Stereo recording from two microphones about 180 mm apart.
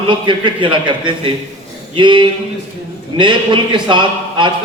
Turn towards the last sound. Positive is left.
turn(degrees=-25)  # may be behind; listen again after turning